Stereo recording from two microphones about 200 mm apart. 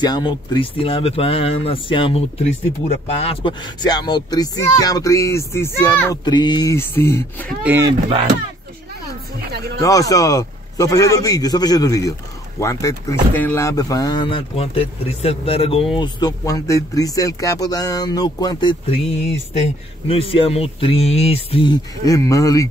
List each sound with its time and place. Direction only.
0.0 s a man's voice: 20° left (ahead or behind)
7.6 s speech: 10° right (ahead or behind)
9.8 s a man's voice: 15° left (ahead or behind)